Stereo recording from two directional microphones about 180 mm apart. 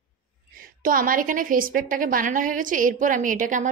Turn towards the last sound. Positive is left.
turn(degrees=-45)  # may be behind; listen again after turning